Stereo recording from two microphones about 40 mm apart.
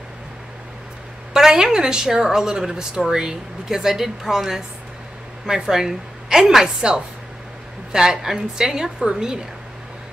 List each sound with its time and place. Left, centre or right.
1.3 s a woman's voice: centre
7.9 s a woman's voice: centre